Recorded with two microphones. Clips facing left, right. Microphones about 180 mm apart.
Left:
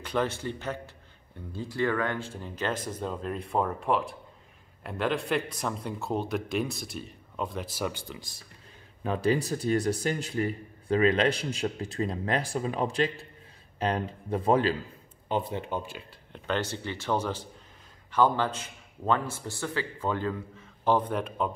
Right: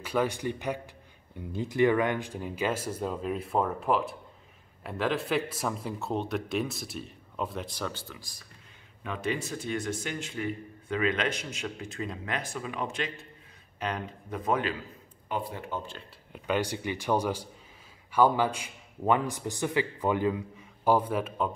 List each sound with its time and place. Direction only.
0.0 s a man's voice: 10° right (ahead or behind); by 8.5 s 20° left (ahead or behind)
9.0 s speech: 35° left (ahead or behind); by 16.0 s 15° left (ahead or behind)
16.3 s a man's voice: 10° right (ahead or behind)